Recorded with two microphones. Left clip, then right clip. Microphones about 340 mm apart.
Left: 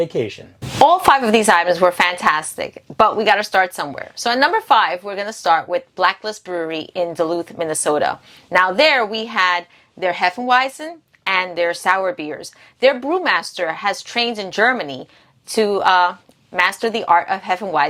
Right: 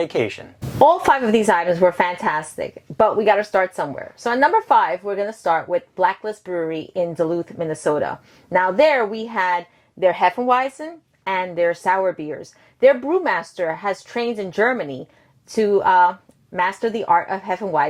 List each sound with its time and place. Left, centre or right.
0.0 s speech: right
0.8 s a woman's voice: left
10.0 s a woman's voice: left